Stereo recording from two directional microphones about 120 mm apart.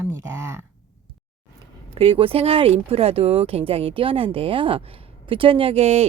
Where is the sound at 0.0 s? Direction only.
20° right (ahead or behind).